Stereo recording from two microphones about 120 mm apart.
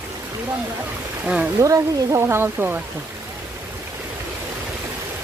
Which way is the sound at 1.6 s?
25° right (ahead or behind).